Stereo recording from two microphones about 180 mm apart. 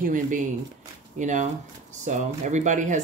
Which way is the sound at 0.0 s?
45° right (ahead or behind).